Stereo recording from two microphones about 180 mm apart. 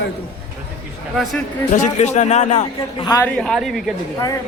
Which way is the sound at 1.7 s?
45° left (ahead or behind).